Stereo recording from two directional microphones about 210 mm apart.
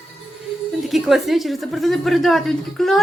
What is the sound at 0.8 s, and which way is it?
A woman's voice, centre (ahead or behind).